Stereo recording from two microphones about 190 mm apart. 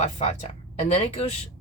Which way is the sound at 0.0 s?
35° left (ahead or behind).